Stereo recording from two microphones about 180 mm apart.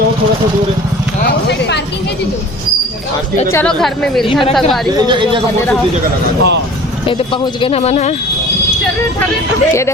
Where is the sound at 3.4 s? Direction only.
15° left (ahead or behind).